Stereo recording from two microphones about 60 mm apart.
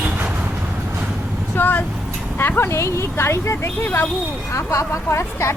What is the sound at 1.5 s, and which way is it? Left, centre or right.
Vehicle, left.